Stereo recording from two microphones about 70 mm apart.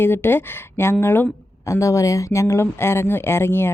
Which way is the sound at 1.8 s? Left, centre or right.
Left.